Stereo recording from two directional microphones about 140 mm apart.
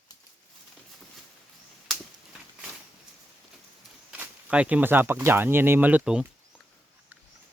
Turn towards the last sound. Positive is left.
turn(degrees=-5)  # may be behind; listen again after turning